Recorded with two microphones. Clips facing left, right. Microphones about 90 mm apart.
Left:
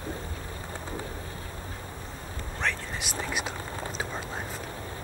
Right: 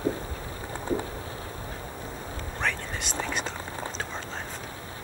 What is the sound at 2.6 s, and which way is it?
Whispering, centre (ahead or behind).